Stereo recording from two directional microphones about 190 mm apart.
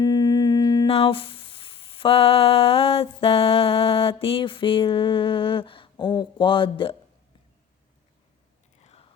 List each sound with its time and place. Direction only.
0.0 s humming: 20° left (ahead or behind)
0.9 s a sound: 30° left (ahead or behind)
8.8 s whispering: 30° left (ahead or behind)